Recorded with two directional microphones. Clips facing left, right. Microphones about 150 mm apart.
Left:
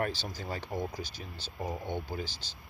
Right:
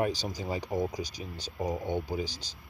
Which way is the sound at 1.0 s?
40° right (ahead or behind).